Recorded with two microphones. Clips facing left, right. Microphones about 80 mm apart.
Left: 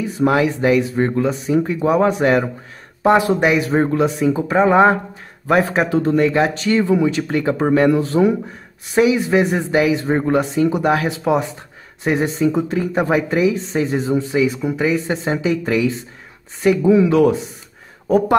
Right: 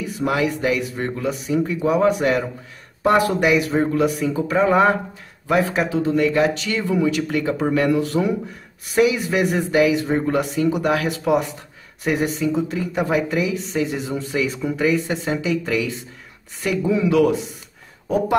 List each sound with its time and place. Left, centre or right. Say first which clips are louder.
0.0 s speech: left 5 dB; left
5.5 s speech: left 3 dB; left
14.1 s speech: left 6 dB; left